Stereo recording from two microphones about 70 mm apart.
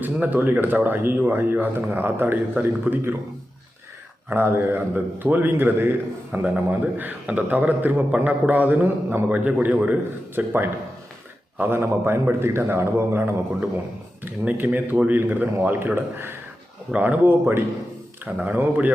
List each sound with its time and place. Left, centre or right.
0.0 s speech: right
4.3 s speech: right
9.3 s a man's voice: centre; by 13.3 s right
14.3 s speech: right
16.9 s speech: right